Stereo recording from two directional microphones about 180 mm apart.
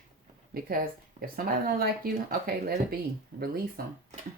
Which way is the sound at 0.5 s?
55° right (ahead or behind).